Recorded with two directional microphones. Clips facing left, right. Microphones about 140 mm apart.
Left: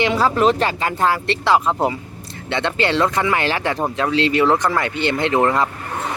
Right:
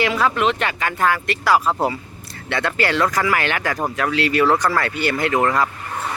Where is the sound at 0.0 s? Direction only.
30° left (ahead or behind).